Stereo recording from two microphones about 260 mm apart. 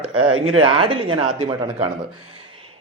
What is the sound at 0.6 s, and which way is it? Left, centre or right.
Speech, right.